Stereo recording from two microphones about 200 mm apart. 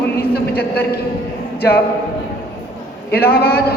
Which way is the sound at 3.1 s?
50° left (ahead or behind).